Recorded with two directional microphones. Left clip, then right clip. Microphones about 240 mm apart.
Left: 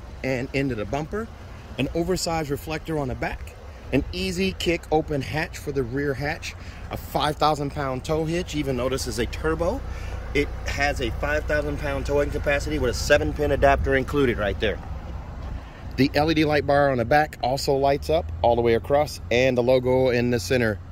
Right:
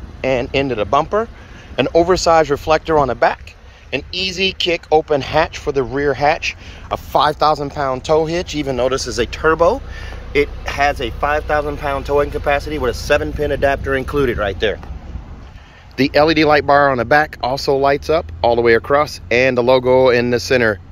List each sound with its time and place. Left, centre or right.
0.2 s speech: centre
2.1 s speech: right
3.9 s speech: centre
16.0 s speech: centre